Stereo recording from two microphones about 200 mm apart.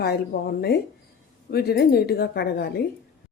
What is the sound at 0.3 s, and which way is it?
A woman's voice, 50° left (ahead or behind).